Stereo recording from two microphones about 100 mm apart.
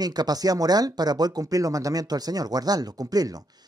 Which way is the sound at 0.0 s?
40° right (ahead or behind).